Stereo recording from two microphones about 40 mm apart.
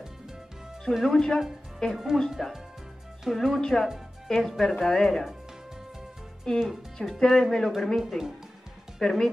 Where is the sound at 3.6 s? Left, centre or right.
Centre.